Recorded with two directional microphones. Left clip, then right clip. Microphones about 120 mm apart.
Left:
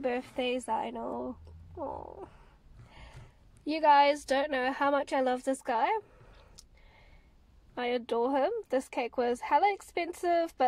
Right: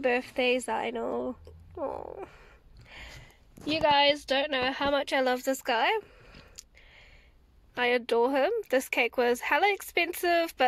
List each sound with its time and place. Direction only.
0.0 s a woman's voice: 5° right (ahead or behind)
3.6 s speech: 15° left (ahead or behind)
3.9 s a woman's voice: 30° left (ahead or behind); by 10.5 s 10° left (ahead or behind)